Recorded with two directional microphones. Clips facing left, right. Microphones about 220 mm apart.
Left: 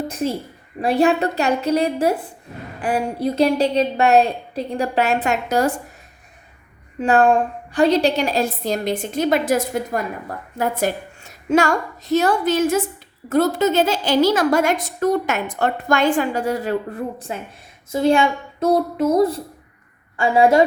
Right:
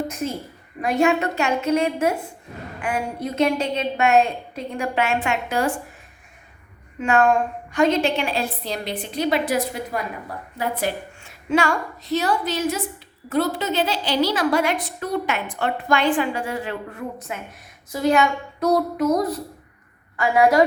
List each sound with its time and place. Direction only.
0.8 s a woman's voice: 35° left (ahead or behind)
7.0 s a woman's voice: 35° left (ahead or behind)